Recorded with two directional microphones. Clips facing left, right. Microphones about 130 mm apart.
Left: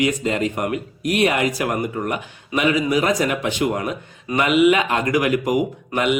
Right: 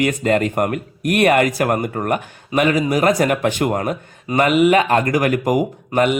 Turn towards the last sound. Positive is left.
turn(degrees=-40)  # may be behind; listen again after turning